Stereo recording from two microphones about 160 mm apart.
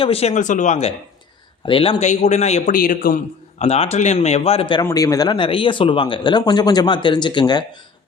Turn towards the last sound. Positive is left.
turn(degrees=25)  # may be behind; listen again after turning